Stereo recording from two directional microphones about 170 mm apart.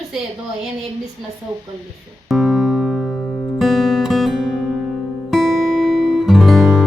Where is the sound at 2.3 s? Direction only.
Centre (ahead or behind).